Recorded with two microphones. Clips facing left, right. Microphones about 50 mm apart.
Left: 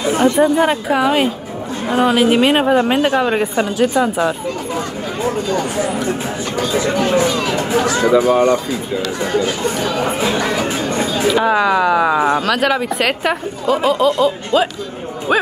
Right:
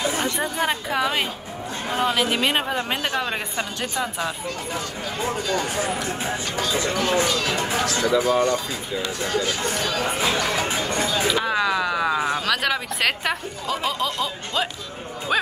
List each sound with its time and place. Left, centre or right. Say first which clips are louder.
0.2 s a woman's voice: left 11 dB; centre
5.5 s speech: left 6 dB; left
8.0 s speech: left 7 dB; left
9.8 s speech: left 6 dB; left
11.3 s a woman's voice: left 8 dB; centre
12.4 s a woman's voice: left 7 dB; centre